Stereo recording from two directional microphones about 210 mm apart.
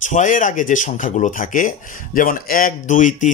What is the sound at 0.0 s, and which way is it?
Speech, 35° left (ahead or behind).